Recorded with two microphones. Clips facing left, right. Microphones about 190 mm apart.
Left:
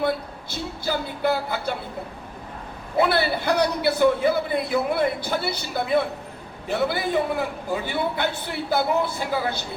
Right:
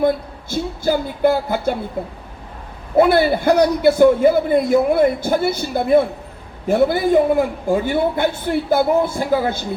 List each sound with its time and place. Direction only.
0.5 s a man's voice: 45° right (ahead or behind)
2.9 s a man's voice: 45° right (ahead or behind)